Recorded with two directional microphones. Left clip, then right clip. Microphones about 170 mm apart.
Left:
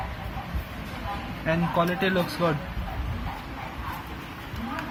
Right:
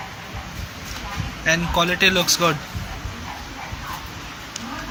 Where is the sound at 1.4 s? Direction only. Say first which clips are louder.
Right 6 dB; 10° right (ahead or behind).